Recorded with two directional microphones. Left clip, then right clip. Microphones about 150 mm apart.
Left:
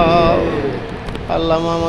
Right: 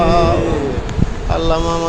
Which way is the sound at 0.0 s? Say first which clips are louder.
Left 1 dB; 10° left (ahead or behind).